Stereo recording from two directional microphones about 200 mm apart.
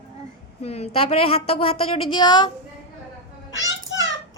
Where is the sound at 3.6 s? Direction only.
65° left (ahead or behind).